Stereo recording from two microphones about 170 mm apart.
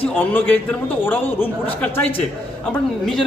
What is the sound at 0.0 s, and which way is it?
A man's voice, 10° left (ahead or behind).